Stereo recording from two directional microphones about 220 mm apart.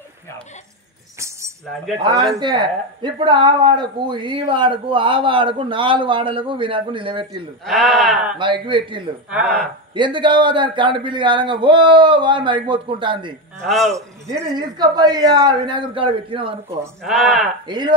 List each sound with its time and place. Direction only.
2.0 s speech: 15° right (ahead or behind)
7.6 s speech: centre (ahead or behind)
8.4 s speech: 20° right (ahead or behind)
9.3 s speech: 5° right (ahead or behind)
9.9 s speech: 20° right (ahead or behind)
13.7 s speech: centre (ahead or behind)
13.9 s speech: 15° right (ahead or behind)
17.0 s speech: centre (ahead or behind)
17.6 s speech: 20° right (ahead or behind)